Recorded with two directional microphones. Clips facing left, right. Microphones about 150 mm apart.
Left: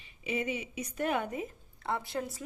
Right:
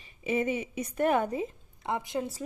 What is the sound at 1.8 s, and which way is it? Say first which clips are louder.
Speech: right 3 dB; 15° right (ahead or behind).